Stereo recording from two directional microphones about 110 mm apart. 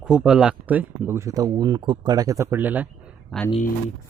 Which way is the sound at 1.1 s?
30° right (ahead or behind).